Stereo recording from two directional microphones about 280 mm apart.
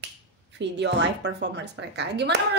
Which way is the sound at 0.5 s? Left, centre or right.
Right.